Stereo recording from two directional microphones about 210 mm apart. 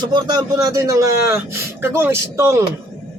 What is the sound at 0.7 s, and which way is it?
Speech, 15° right (ahead or behind).